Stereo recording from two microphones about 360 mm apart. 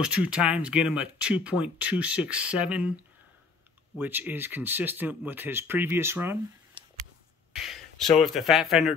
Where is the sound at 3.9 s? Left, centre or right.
Centre.